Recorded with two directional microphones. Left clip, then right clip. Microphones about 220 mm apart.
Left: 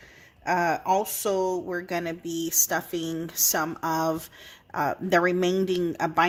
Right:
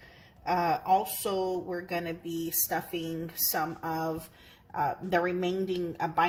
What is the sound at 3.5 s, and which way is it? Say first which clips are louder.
Speech: left 3 dB; 45° left (ahead or behind).